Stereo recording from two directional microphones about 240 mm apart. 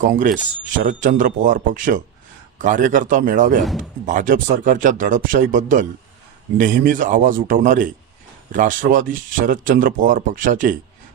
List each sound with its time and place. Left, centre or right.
0.0 s speech: right